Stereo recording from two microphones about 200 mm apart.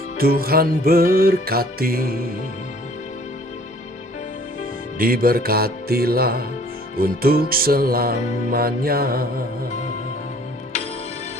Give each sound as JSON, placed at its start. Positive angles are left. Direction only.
{"t": 0.2, "sound": "music", "side_deg": -50}
{"t": 4.9, "sound": "music", "side_deg": -45}